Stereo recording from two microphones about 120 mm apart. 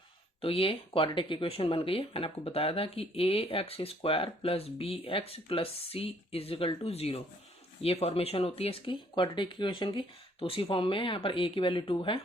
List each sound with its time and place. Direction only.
0.4 s speech: 50° left (ahead or behind)